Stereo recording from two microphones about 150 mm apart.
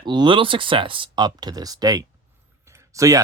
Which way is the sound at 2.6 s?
20° right (ahead or behind).